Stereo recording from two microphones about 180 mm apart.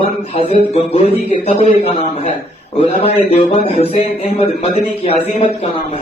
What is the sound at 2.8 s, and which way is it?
Speech, 35° left (ahead or behind).